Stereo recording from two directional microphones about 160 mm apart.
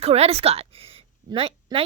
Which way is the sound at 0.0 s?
40° right (ahead or behind).